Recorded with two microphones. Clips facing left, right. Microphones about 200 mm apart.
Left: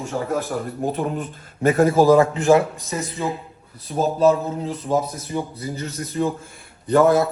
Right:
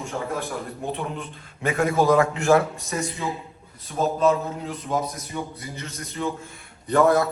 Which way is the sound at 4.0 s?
35° left (ahead or behind).